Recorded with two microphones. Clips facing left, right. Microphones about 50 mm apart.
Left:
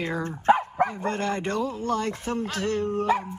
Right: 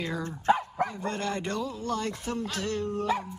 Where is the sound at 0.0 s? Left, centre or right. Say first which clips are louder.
Left 4 dB; left.